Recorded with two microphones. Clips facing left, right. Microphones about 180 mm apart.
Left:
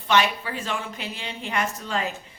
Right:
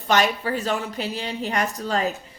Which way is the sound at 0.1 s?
40° right (ahead or behind).